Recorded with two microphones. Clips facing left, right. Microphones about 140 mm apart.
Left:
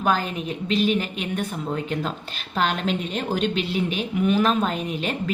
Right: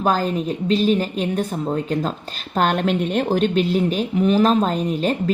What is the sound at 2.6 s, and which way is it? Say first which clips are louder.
A woman's voice: right 5 dB; 50° right (ahead or behind).